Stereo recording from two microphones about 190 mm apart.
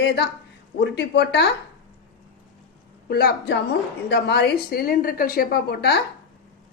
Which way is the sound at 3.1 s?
55° left (ahead or behind).